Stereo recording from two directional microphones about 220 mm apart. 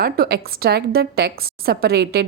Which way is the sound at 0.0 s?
45° right (ahead or behind).